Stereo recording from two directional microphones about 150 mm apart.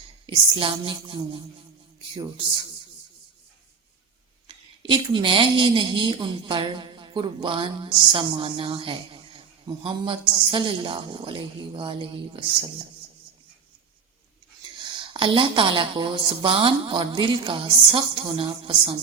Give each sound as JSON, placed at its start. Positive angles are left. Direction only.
{"t": 0.3, "sound": "a woman's voice", "side_deg": -35}
{"t": 4.4, "sound": "a woman's voice", "side_deg": -35}
{"t": 14.9, "sound": "a woman's voice", "side_deg": -35}